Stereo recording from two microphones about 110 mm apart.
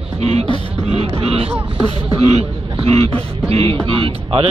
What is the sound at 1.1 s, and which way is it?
A man's voice, 60° right (ahead or behind).